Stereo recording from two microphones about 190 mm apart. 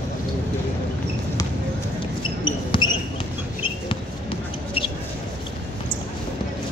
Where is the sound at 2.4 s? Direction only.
25° left (ahead or behind).